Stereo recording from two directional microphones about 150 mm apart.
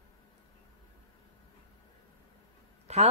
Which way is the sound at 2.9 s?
45° right (ahead or behind).